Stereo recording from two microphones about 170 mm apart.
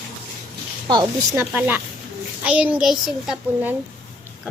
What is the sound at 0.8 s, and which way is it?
Speech, 25° right (ahead or behind).